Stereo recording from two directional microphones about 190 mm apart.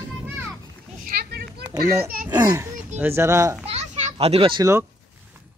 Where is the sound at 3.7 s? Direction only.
35° right (ahead or behind).